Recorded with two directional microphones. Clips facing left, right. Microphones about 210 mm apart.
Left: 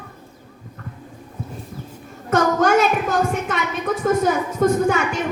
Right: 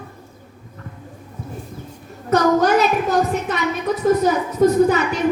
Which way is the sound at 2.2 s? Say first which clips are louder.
Right 2 dB; 50° left (ahead or behind).